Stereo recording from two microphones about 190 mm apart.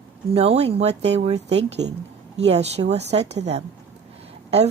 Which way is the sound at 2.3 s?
35° right (ahead or behind).